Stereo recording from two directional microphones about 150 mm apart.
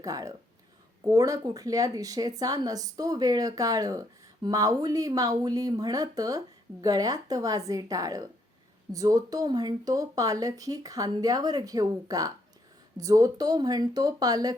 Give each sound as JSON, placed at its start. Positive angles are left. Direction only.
{"t": 0.0, "sound": "speech", "side_deg": -25}